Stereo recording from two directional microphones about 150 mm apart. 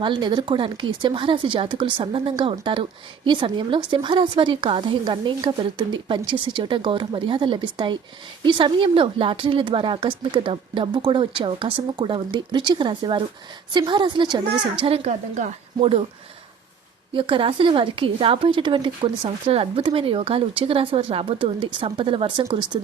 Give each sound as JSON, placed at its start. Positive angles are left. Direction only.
{"t": 0.0, "sound": "a woman's voice", "side_deg": -30}
{"t": 17.2, "sound": "a woman's voice", "side_deg": -35}